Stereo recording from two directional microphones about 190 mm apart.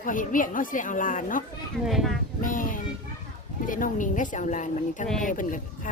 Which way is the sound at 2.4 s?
45° left (ahead or behind).